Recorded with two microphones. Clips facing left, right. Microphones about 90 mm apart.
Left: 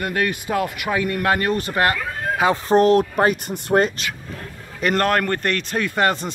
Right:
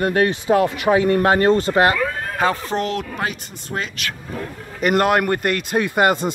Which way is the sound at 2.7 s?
40° left (ahead or behind).